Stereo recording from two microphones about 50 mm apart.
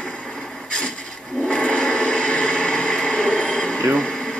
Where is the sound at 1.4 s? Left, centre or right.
Centre.